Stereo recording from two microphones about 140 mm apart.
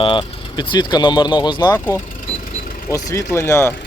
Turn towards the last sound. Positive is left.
turn(degrees=20)  # may be behind; listen again after turning